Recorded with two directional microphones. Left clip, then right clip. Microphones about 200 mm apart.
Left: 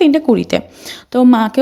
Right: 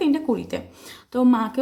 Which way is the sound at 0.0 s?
35° left (ahead or behind).